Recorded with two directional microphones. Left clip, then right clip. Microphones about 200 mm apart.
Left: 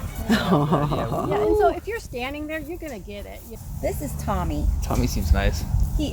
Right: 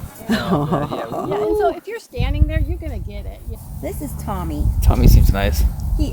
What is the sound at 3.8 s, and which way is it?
Speech, 5° right (ahead or behind).